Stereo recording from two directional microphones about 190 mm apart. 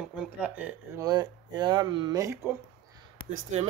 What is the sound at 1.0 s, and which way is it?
Speech, 20° right (ahead or behind).